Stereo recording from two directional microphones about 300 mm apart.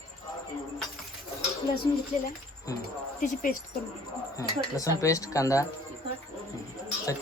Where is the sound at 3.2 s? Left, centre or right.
Left.